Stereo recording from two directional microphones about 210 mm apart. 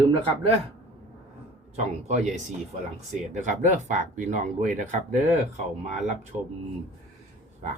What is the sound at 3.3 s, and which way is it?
Speech, 35° right (ahead or behind).